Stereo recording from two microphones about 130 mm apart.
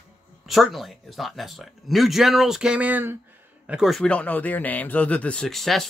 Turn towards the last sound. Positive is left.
turn(degrees=0)  # may be behind; listen again after turning